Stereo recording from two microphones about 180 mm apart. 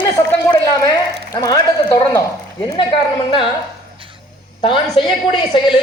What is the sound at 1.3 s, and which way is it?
Speech, 20° left (ahead or behind).